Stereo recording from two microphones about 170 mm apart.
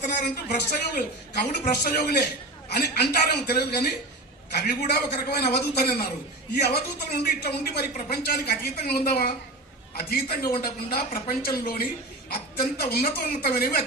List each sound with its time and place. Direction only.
0.4 s speech: 70° left (ahead or behind)